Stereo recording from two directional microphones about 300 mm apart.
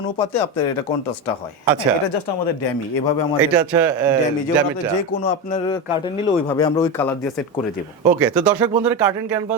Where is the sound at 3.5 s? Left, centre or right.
Centre.